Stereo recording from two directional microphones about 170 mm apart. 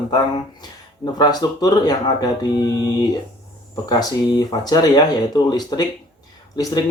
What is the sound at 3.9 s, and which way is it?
Speech, 25° left (ahead or behind).